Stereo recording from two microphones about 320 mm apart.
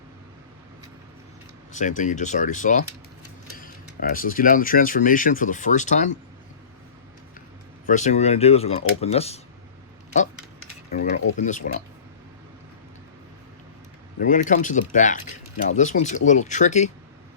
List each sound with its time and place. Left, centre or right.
1.7 s speech: left
4.1 s speech: left
7.9 s speech: left
10.9 s speech: left
14.2 s speech: left